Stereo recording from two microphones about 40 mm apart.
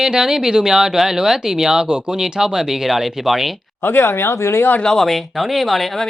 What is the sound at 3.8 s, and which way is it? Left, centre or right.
Speech, left.